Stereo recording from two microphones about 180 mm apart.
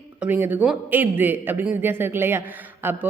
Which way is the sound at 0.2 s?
10° right (ahead or behind).